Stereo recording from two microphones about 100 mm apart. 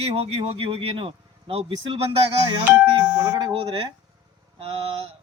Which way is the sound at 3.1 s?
45° right (ahead or behind).